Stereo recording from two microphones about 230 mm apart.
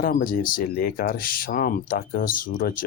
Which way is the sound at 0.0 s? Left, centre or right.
Left.